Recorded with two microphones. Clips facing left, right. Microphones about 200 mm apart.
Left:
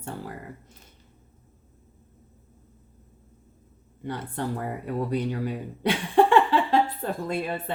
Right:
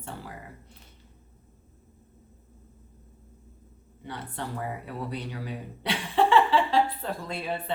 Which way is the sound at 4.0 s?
50° left (ahead or behind).